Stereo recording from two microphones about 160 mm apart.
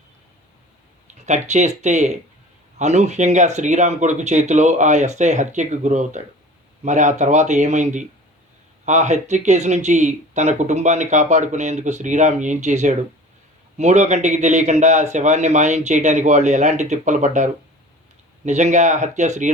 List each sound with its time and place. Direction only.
1.0 s speech: 45° right (ahead or behind)